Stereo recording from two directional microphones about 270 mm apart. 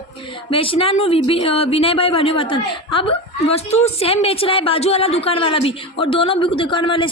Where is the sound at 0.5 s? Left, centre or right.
Centre.